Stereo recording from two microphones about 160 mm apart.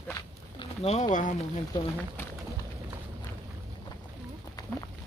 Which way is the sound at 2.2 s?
15° left (ahead or behind).